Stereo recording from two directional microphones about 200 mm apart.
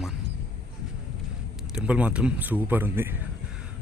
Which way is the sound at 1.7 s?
5° right (ahead or behind).